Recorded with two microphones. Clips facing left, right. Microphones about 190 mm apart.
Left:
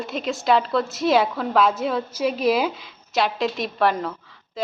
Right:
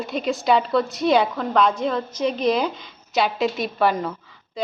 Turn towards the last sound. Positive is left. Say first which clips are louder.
# right 1 dB
turn(degrees=0)  # may be behind; listen again after turning